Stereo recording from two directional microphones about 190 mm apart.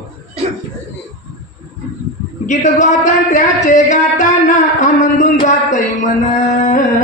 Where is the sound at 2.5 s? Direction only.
40° left (ahead or behind).